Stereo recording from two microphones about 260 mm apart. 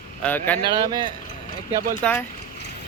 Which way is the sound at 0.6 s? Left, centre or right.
Centre.